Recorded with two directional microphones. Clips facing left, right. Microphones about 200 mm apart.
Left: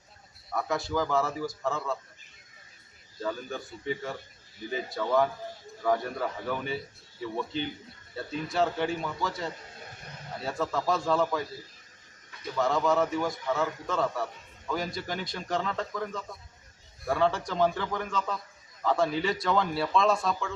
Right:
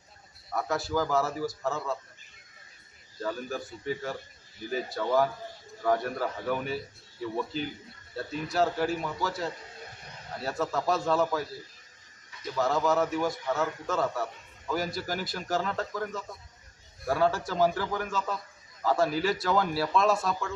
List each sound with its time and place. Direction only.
0.5 s a man's voice: centre (ahead or behind)
3.2 s a man's voice: centre (ahead or behind)
12.5 s a man's voice: centre (ahead or behind)